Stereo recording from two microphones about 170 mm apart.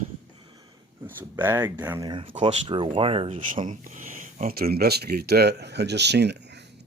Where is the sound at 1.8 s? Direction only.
15° right (ahead or behind).